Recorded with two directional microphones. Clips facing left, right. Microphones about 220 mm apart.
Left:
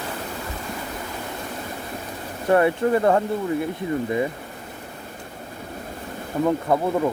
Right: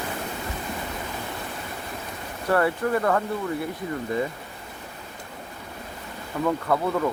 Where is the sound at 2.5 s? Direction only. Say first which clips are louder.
Left 4 dB; 20° left (ahead or behind).